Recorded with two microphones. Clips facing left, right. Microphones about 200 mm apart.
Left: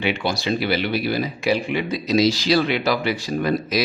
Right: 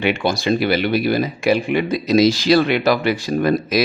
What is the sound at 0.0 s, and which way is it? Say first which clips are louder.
Speech: right 4 dB; 50° right (ahead or behind).